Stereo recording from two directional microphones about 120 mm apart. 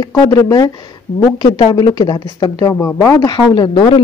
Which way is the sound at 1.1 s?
75° left (ahead or behind).